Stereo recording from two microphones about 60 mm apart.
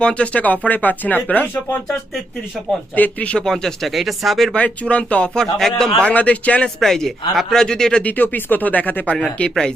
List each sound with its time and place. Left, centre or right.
0.0 s speech: centre
2.9 s speech: left
3.4 s speech: centre
4.5 s speech: left; by 5.9 s centre
6.1 s speech: left
6.7 s speech: centre
8.0 s speech: left